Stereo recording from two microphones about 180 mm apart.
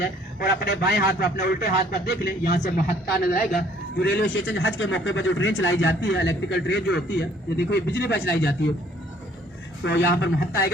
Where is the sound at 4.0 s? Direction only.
75° left (ahead or behind).